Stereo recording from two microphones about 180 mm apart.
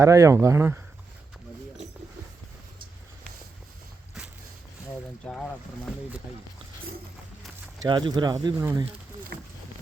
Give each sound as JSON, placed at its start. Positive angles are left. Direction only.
{"t": 0.0, "sound": "speech", "side_deg": -15}
{"t": 5.2, "sound": "speech", "side_deg": 5}
{"t": 7.9, "sound": "speech", "side_deg": -25}
{"t": 9.3, "sound": "a sound", "side_deg": -65}